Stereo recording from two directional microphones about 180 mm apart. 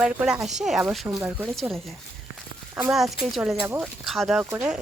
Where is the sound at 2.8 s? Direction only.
Centre (ahead or behind).